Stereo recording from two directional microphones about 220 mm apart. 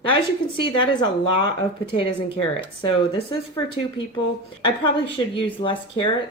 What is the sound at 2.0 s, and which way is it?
Speech, 25° left (ahead or behind).